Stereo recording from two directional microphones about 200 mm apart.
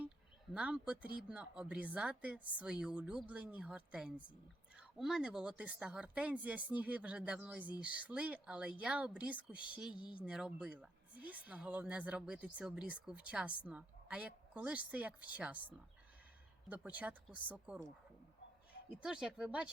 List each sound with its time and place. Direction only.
0.5 s a woman's voice: 5° right (ahead or behind)
9.9 s speech: 25° left (ahead or behind)
10.2 s a woman's voice: 5° right (ahead or behind)
18.9 s speech: 5° right (ahead or behind)